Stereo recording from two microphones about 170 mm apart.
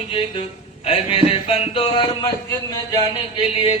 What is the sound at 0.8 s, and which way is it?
Speech, 35° left (ahead or behind).